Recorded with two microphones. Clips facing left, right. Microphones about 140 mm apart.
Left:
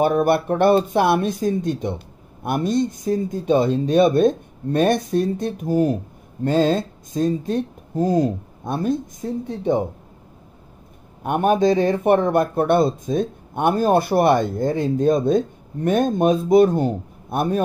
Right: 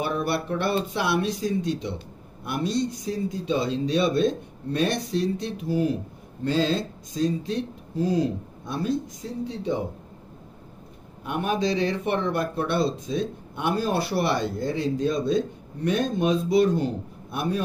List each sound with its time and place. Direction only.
0.0 s a man's voice: 50° left (ahead or behind)
11.2 s a man's voice: 50° left (ahead or behind)